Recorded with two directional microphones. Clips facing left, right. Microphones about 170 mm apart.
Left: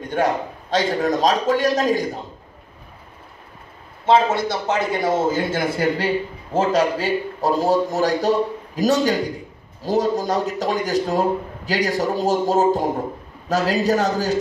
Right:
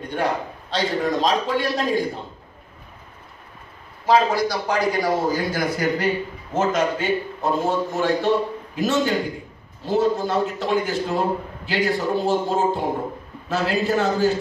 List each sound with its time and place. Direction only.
0.1 s a man's voice: 45° left (ahead or behind)
4.0 s a man's voice: 25° left (ahead or behind)